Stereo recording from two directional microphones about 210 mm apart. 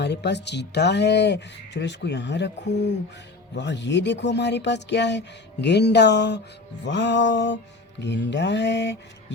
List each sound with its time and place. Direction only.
0.0 s speech: 55° left (ahead or behind)